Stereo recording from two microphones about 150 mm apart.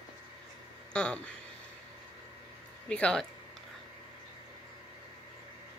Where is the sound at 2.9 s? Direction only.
5° left (ahead or behind).